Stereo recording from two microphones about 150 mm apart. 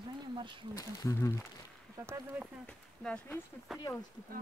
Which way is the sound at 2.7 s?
5° left (ahead or behind).